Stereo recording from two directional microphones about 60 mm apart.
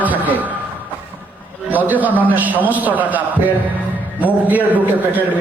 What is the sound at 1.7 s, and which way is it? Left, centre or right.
A man's voice, right.